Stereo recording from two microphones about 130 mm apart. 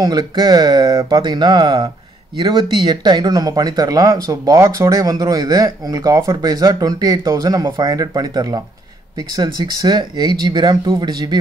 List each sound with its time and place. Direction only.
0.0 s speech: 30° right (ahead or behind)